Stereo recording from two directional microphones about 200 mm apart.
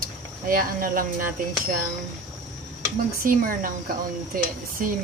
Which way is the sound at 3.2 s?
45° right (ahead or behind).